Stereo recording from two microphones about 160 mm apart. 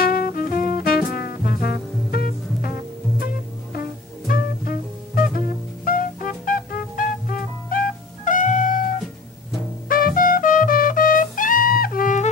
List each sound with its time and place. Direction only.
0.0 s music: 65° left (ahead or behind)
4.3 s music: 65° left (ahead or behind)
8.3 s cat: 55° left (ahead or behind)
9.8 s music: 65° left (ahead or behind)